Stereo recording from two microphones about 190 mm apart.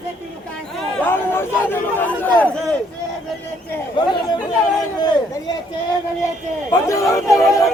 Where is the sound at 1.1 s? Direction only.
10° left (ahead or behind).